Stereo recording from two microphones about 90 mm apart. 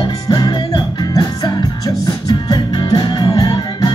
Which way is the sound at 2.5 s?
55° left (ahead or behind).